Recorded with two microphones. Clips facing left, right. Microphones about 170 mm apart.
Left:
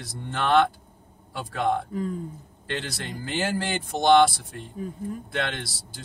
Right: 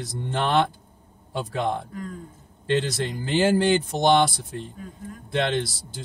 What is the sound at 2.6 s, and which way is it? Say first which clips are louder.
Speech: right 9 dB; 25° right (ahead or behind).